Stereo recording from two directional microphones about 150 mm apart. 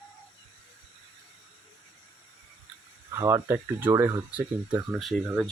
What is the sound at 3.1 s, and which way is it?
Speech, 20° right (ahead or behind).